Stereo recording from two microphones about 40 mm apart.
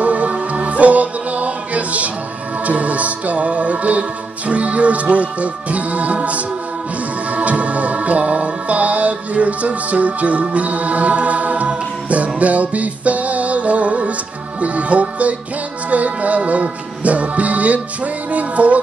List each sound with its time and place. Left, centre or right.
0.0 s music: right